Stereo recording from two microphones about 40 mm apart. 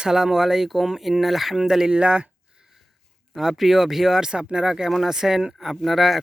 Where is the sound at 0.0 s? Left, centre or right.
Centre.